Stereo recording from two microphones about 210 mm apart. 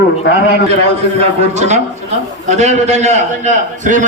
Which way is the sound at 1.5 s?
30° right (ahead or behind).